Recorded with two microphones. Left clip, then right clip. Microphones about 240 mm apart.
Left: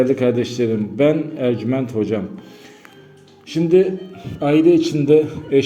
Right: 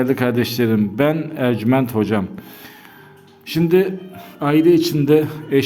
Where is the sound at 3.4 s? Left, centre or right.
Right.